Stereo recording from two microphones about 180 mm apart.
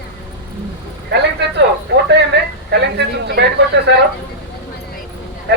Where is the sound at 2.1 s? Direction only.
70° right (ahead or behind).